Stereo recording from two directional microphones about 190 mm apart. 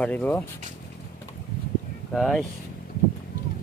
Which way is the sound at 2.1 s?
Centre (ahead or behind).